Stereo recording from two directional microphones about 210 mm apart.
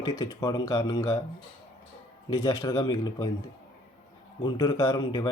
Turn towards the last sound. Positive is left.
turn(degrees=15)  # may be behind; listen again after turning